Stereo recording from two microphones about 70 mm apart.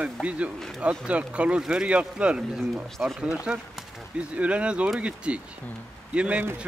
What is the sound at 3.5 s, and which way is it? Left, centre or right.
A man's voice, centre.